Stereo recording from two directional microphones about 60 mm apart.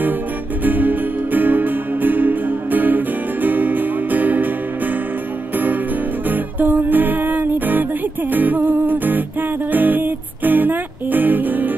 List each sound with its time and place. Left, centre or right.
0.7 s music: right
6.3 s music: right